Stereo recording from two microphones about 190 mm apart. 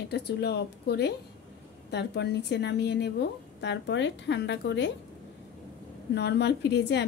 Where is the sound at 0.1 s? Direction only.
60° left (ahead or behind).